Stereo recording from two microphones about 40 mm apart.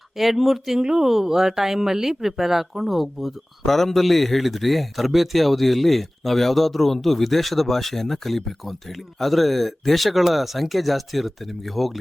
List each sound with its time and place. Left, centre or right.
0.2 s speech: centre
0.8 s speech: centre